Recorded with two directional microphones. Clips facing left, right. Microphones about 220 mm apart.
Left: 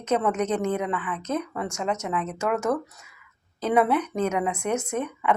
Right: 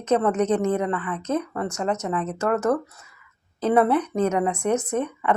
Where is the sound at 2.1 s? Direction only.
35° right (ahead or behind).